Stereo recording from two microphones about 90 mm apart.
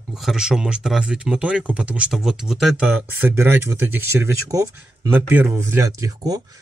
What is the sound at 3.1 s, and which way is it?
Speech, 20° right (ahead or behind).